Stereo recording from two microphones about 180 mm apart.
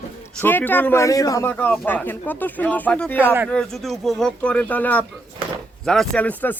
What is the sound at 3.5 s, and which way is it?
Speech, 5° left (ahead or behind).